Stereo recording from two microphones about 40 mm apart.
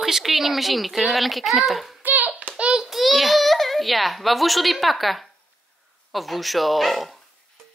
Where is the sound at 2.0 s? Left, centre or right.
Right.